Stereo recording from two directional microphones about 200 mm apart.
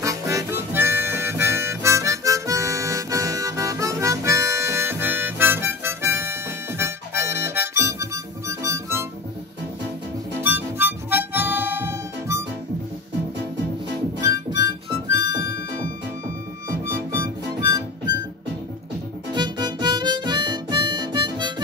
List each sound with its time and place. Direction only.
0.0 s harmonica: 15° right (ahead or behind)
10.4 s harmonica: 10° right (ahead or behind)
14.7 s harmonica: 55° left (ahead or behind)
16.8 s music: 15° right (ahead or behind)
19.3 s harmonica: 20° right (ahead or behind)